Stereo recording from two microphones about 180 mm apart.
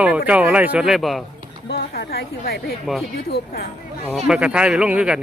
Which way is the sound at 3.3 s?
60° left (ahead or behind).